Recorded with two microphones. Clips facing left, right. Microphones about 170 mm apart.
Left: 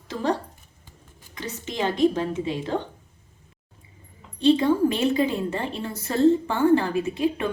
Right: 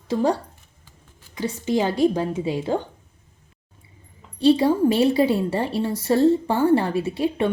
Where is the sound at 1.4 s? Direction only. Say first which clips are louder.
Right 6 dB; 35° right (ahead or behind).